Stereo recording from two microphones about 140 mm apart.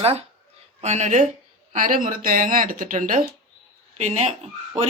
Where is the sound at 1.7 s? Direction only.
75° right (ahead or behind).